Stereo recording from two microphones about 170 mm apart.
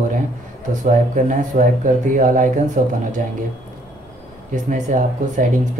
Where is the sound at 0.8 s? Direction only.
50° right (ahead or behind).